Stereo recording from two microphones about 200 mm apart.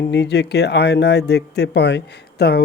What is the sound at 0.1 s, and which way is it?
Speech, 55° left (ahead or behind).